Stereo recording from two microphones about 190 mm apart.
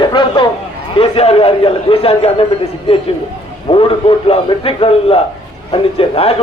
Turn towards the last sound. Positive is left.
turn(degrees=30)  # may be behind; listen again after turning